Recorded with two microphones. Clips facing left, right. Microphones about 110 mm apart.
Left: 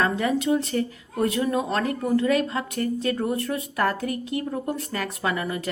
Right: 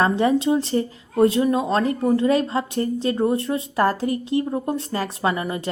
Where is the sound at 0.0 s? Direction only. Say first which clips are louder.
Right 5 dB; 30° right (ahead or behind).